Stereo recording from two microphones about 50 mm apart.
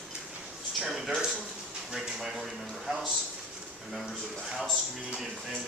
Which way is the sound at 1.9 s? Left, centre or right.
Centre.